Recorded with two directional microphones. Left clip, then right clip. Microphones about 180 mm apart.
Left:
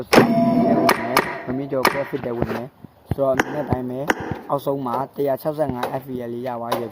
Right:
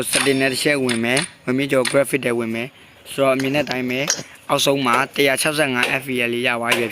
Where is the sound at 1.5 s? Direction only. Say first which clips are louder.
Right 9 dB; 45° right (ahead or behind).